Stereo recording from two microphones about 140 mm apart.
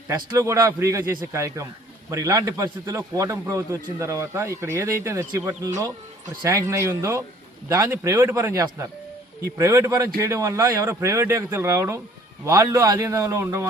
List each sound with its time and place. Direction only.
0.3 s a man's voice: 20° right (ahead or behind)